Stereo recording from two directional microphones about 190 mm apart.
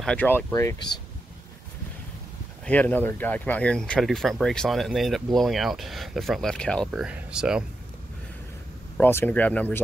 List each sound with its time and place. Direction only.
0.0 s speech: 5° left (ahead or behind)
2.6 s speech: 10° left (ahead or behind)
8.9 s speech: 10° left (ahead or behind)